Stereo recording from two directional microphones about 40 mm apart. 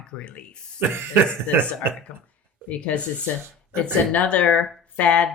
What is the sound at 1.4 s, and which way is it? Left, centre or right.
Speech, left.